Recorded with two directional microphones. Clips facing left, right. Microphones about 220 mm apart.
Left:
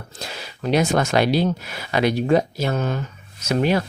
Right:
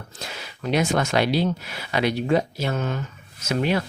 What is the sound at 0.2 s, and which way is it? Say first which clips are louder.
Speech: left 3 dB; 35° left (ahead or behind).